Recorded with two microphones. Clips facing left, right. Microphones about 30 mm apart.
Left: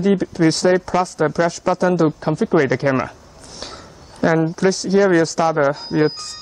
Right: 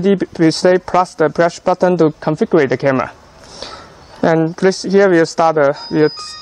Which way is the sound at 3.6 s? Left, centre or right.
Centre.